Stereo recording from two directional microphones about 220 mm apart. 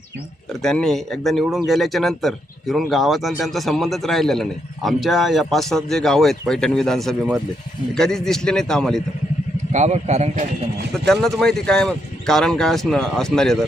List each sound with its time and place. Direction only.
0.6 s speech: centre (ahead or behind)
9.7 s a man's voice: 30° right (ahead or behind)
10.9 s speech: 5° left (ahead or behind)